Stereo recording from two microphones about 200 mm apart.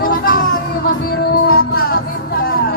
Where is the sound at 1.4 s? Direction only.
50° left (ahead or behind).